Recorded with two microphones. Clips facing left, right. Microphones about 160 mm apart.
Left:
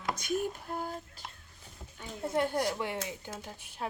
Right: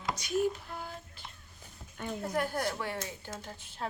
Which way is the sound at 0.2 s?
50° left (ahead or behind).